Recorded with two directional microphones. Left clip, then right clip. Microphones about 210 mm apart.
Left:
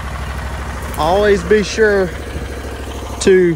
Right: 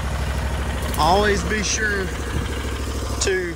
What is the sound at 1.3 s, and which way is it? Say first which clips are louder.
Vehicle: left 9 dB; 15° left (ahead or behind).